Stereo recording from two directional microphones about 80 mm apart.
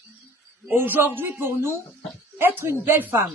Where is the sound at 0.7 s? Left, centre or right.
Right.